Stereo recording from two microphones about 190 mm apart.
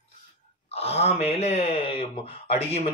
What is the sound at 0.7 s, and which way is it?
Speech, 35° left (ahead or behind).